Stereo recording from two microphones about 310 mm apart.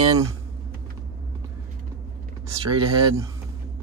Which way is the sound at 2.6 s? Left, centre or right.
Centre.